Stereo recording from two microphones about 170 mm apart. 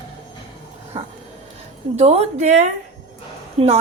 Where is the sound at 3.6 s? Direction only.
35° right (ahead or behind).